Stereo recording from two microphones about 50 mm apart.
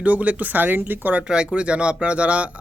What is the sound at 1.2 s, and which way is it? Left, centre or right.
Speech, right.